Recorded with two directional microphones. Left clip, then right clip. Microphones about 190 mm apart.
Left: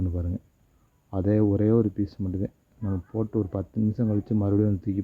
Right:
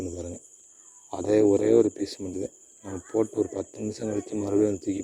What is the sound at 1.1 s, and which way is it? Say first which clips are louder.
Speech: right 4 dB; 25° right (ahead or behind).